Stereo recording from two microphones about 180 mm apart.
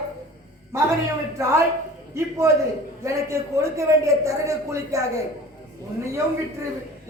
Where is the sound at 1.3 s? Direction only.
15° right (ahead or behind).